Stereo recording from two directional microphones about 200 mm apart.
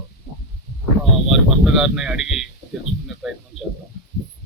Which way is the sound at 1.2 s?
Centre (ahead or behind).